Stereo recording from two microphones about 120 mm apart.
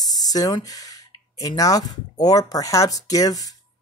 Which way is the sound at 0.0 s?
30° left (ahead or behind).